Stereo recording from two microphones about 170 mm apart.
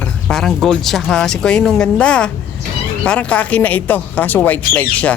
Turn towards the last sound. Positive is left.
turn(degrees=10)  # may be behind; listen again after turning